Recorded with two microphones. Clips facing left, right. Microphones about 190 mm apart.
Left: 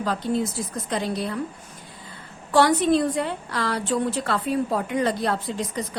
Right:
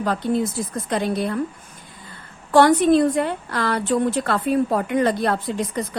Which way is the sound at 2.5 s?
55° right (ahead or behind).